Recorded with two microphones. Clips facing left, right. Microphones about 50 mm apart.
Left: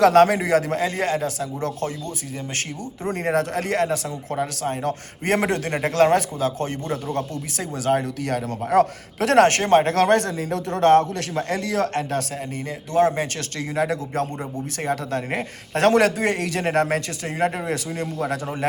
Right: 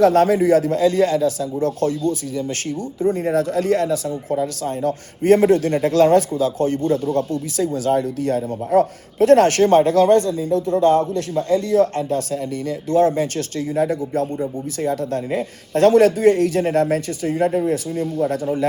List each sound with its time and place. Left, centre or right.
0.0 s speech: left
1.8 s speech: left
3.1 s speech: left
12.6 s speech: left